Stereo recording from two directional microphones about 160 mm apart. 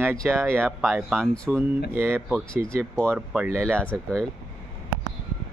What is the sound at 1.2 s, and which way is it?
Speech, 5° left (ahead or behind).